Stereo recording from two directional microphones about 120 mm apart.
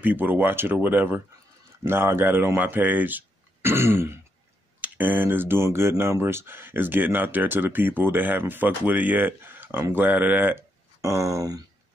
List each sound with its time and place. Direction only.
0.0 s speech: 15° right (ahead or behind)
11.0 s speech: 30° right (ahead or behind)